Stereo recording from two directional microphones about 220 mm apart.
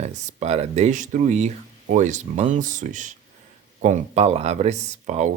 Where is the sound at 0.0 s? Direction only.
30° right (ahead or behind).